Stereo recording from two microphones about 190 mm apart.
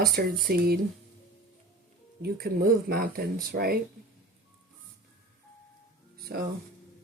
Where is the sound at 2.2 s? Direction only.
55° right (ahead or behind).